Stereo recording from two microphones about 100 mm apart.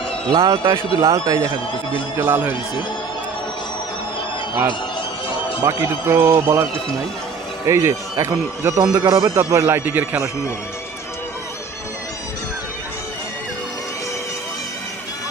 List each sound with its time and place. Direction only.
0.3 s a man's voice: 35° right (ahead or behind); by 2.6 s 20° right (ahead or behind)
5.6 s a man's voice: 30° right (ahead or behind)
7.7 s a man's voice: 30° right (ahead or behind)